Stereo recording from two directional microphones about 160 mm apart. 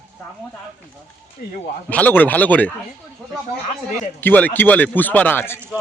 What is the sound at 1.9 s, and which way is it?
Speech, 10° left (ahead or behind).